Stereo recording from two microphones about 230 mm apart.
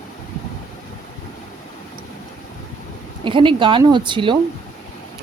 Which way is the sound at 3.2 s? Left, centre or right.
Right.